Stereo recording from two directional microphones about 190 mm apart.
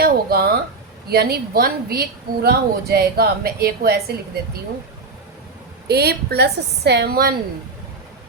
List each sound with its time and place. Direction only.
0.0 s a sound: 55° right (ahead or behind)
1.0 s a woman's voice: 55° right (ahead or behind)
5.9 s a woman's voice: 55° right (ahead or behind)